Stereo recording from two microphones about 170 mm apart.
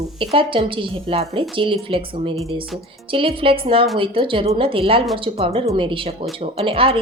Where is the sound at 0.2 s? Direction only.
30° right (ahead or behind).